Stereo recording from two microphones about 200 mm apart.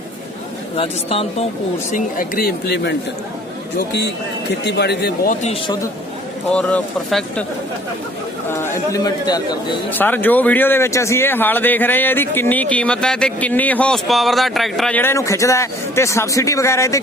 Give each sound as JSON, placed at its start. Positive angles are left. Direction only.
{"t": 0.8, "sound": "speech", "side_deg": 30}
{"t": 1.9, "sound": "a man's voice", "side_deg": 45}
{"t": 6.5, "sound": "speech", "side_deg": 5}
{"t": 8.4, "sound": "speech", "side_deg": 10}
{"t": 9.9, "sound": "speech", "side_deg": 10}